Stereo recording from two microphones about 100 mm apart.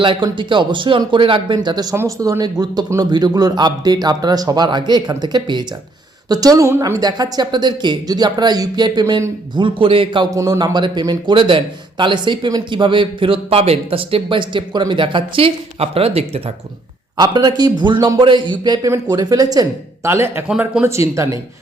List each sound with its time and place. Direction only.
0.0 s speech: 55° right (ahead or behind)
1.5 s speech: 45° right (ahead or behind)
2.0 s speech: 30° right (ahead or behind)
6.7 s speech: 25° right (ahead or behind)
7.0 s speech: 45° right (ahead or behind)
9.6 s speech: 60° right (ahead or behind)
10.3 s speech: 30° right (ahead or behind)
10.6 s speech: 50° right (ahead or behind)
11.3 s speech: 55° right (ahead or behind); by 16.4 s 80° right
17.2 s speech: 45° right (ahead or behind)
20.1 s speech: 25° right (ahead or behind)